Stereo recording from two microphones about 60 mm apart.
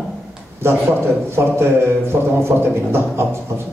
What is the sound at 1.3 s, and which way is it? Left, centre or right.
Speech, right.